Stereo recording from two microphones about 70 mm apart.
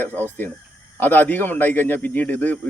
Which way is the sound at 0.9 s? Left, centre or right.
Left.